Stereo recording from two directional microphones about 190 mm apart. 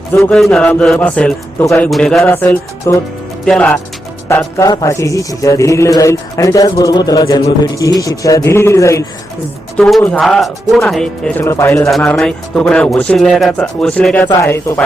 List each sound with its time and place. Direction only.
0.1 s music: 5° left (ahead or behind)
1.9 s speech: centre (ahead or behind)
2.3 s music: 15° left (ahead or behind)
3.4 s speech: 5° left (ahead or behind)
4.3 s music: 15° left (ahead or behind)
9.7 s speech: 5° left (ahead or behind)
14.3 s music: 15° left (ahead or behind)